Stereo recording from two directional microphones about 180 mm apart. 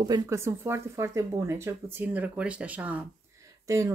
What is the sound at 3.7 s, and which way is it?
Speech, 15° right (ahead or behind).